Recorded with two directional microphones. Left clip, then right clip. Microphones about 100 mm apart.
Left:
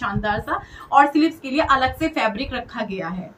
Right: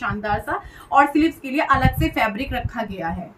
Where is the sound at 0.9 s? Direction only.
20° right (ahead or behind).